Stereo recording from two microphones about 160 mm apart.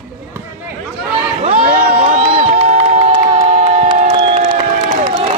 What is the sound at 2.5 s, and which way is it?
Crowd, 35° right (ahead or behind).